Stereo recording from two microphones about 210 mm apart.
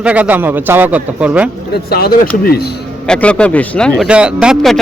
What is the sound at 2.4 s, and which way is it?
Speech, 45° left (ahead or behind).